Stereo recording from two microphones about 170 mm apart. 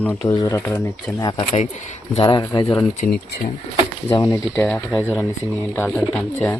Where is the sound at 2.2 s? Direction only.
25° left (ahead or behind).